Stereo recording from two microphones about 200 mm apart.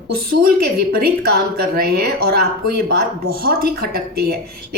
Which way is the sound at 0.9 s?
50° right (ahead or behind).